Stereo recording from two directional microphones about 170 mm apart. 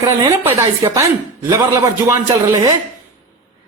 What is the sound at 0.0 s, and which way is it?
Speech, 20° right (ahead or behind).